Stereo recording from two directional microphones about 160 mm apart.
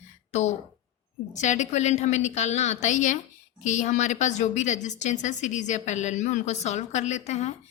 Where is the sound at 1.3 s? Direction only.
50° left (ahead or behind).